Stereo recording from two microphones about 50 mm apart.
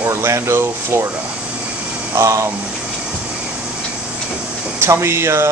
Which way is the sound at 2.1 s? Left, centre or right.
Right.